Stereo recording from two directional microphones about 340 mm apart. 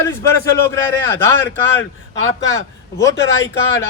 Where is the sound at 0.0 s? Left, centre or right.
Centre.